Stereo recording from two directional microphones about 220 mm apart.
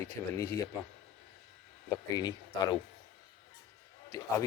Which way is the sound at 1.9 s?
15° left (ahead or behind).